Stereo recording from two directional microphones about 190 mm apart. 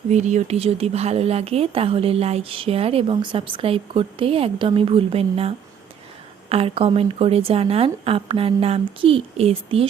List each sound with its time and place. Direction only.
0.1 s a woman's voice: 40° right (ahead or behind)